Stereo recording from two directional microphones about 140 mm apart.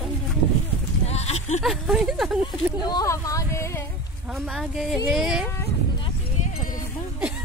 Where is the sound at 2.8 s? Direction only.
25° left (ahead or behind).